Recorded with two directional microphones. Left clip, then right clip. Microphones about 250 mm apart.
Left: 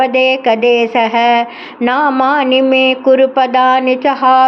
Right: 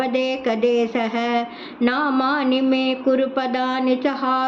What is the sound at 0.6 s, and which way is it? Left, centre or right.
Speech, right.